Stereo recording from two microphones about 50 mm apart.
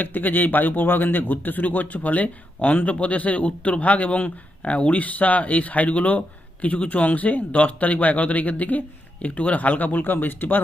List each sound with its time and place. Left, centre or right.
0.0 s speech: left